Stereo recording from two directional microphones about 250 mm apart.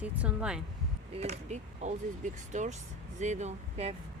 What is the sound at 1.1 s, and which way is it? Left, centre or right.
Speech, right.